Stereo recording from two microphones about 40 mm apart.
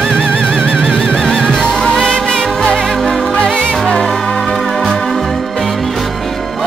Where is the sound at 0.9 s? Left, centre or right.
Left.